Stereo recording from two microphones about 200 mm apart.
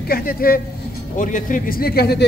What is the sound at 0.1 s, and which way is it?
A woman's voice, 45° left (ahead or behind).